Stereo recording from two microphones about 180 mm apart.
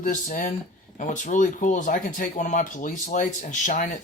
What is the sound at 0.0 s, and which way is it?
Speech, 45° left (ahead or behind).